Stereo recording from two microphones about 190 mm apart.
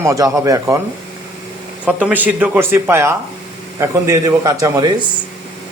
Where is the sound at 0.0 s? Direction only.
15° right (ahead or behind).